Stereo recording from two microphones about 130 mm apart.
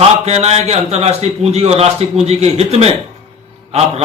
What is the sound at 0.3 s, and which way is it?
A man's voice, 55° right (ahead or behind).